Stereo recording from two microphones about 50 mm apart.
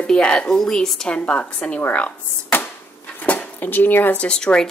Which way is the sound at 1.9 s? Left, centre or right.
Left.